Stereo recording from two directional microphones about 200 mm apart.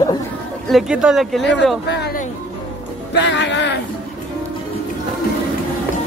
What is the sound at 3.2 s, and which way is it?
Speech, 60° left (ahead or behind).